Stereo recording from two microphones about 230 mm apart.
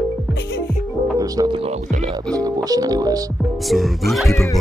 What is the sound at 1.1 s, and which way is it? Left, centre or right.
Speech, centre.